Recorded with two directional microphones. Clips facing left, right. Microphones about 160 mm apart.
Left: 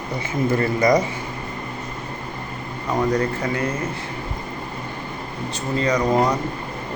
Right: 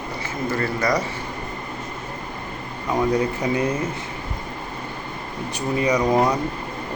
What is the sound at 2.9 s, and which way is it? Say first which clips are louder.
Speech: even; 10° right (ahead or behind).